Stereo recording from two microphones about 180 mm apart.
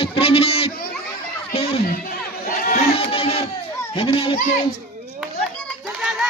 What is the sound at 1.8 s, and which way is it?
Crowd, 55° left (ahead or behind).